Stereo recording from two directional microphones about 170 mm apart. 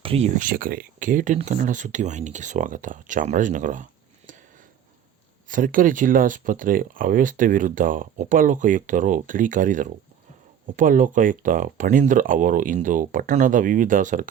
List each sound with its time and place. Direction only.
0.0 s a sound: 35° right (ahead or behind)
0.3 s speech: 55° right (ahead or behind)
5.5 s speech: 55° right (ahead or behind)